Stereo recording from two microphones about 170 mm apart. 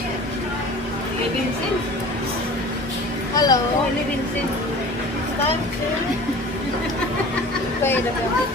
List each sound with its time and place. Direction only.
3.3 s speech: 20° left (ahead or behind)